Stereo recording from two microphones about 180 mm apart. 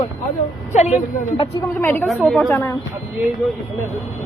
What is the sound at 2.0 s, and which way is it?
Speech, centre (ahead or behind).